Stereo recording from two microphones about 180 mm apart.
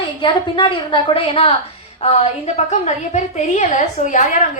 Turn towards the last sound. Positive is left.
turn(degrees=40)  # may be behind; listen again after turning